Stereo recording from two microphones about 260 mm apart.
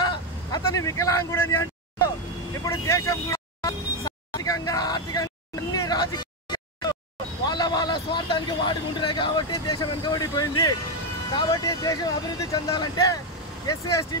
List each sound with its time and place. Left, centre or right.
0.0 s vehicle: centre
7.4 s a man's voice: centre